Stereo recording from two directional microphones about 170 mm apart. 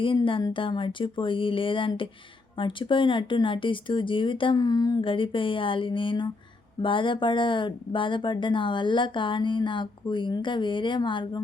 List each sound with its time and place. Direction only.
0.0 s speech: 30° left (ahead or behind)